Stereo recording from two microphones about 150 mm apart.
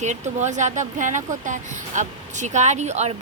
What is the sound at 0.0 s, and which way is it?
Speech, 50° right (ahead or behind).